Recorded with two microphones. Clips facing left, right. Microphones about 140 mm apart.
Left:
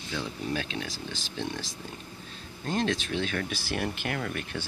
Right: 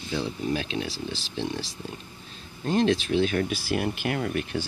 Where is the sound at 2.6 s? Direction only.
25° right (ahead or behind).